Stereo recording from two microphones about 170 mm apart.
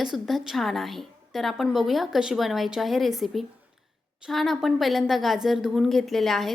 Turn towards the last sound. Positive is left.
turn(degrees=0)  # may be behind; listen again after turning